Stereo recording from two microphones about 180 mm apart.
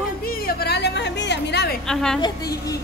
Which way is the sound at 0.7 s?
65° left (ahead or behind).